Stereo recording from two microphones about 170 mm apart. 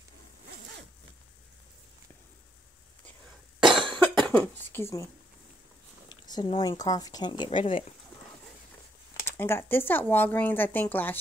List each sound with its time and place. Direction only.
3.5 s cough: centre (ahead or behind)
3.8 s cough: 30° right (ahead or behind)
4.2 s speech: 10° left (ahead or behind)
6.0 s speech: 25° left (ahead or behind)
9.2 s speech: 15° left (ahead or behind)